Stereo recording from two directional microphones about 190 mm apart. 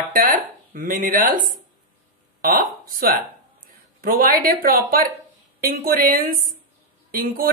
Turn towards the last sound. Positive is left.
turn(degrees=-50)  # may be behind; listen again after turning